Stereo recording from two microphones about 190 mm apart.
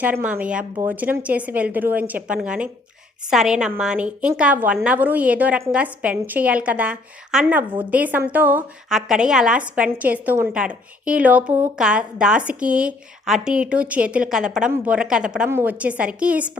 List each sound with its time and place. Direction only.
0.0 s a woman's voice: 10° right (ahead or behind)